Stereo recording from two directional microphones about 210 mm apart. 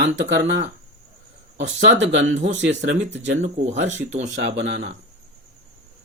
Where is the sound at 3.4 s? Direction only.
35° right (ahead or behind).